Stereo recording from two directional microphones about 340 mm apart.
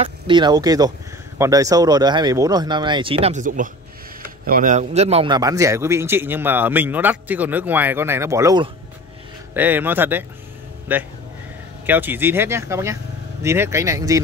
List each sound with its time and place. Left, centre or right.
0.0 s a man's voice: centre